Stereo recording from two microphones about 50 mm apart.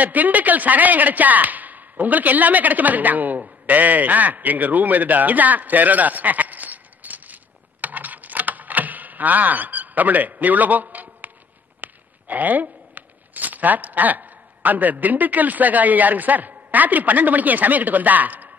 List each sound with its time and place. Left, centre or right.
0.0 s speech: right
7.8 s a sound: right
11.8 s speech: right